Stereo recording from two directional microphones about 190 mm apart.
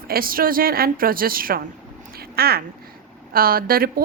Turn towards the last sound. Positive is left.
turn(degrees=-50)  # may be behind; listen again after turning